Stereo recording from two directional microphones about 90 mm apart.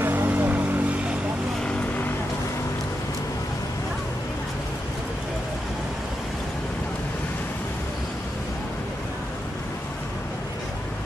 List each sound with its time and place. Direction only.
0.0 s vehicle: 20° right (ahead or behind)